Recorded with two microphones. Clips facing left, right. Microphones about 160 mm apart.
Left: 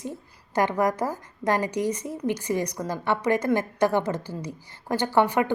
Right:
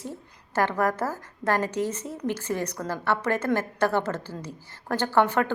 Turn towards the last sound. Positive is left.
turn(degrees=10)  # may be behind; listen again after turning